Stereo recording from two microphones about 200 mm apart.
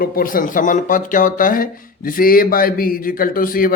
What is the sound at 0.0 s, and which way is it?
Speech, 45° left (ahead or behind).